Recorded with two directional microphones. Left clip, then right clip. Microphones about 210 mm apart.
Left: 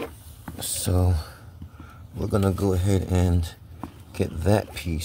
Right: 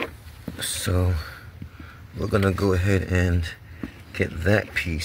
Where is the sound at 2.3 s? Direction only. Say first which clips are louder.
Right 2 dB; 5° left (ahead or behind).